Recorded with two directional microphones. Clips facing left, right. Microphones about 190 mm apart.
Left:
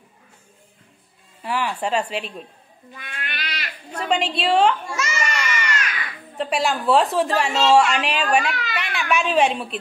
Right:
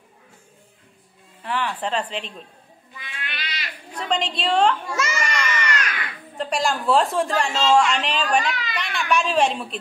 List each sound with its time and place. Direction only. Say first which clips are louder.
1.4 s a woman's voice: left 2 dB; 10° left (ahead or behind)
2.9 s cat: left 2 dB; 50° left (ahead or behind)
4.0 s a woman's voice: left 2 dB; 5° left (ahead or behind)
4.9 s baby cry: right 1 dB; 35° right (ahead or behind)
6.3 s a woman's voice: left 1 dB; 5° left (ahead or behind)